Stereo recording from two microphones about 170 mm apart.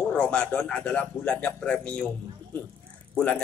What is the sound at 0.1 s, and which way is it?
Speech, 5° left (ahead or behind).